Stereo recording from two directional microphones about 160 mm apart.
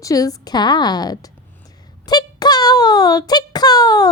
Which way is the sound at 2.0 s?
25° left (ahead or behind).